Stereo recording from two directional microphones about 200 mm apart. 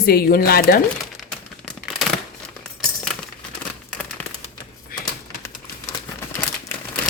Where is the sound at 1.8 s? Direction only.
Centre (ahead or behind).